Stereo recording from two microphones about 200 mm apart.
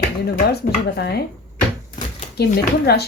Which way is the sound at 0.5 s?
55° left (ahead or behind).